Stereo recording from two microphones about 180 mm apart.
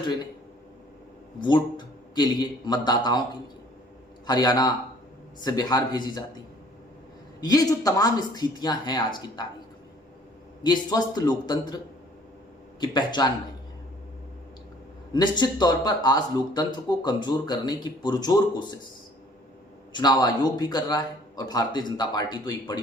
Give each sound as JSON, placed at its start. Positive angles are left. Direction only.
{"t": 1.4, "sound": "a man's voice", "side_deg": 25}
{"t": 4.3, "sound": "a man's voice", "side_deg": 20}
{"t": 7.4, "sound": "a man's voice", "side_deg": 20}
{"t": 10.6, "sound": "a man's voice", "side_deg": 25}
{"t": 12.8, "sound": "a man's voice", "side_deg": 25}
{"t": 15.1, "sound": "a man's voice", "side_deg": 25}
{"t": 19.9, "sound": "a man's voice", "side_deg": 25}